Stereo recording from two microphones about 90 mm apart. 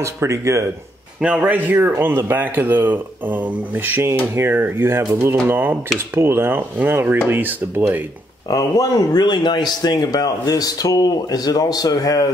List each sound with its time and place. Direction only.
0.0 s speech: 35° right (ahead or behind)
1.2 s speech: 15° right (ahead or behind)
8.5 s speech: 45° left (ahead or behind)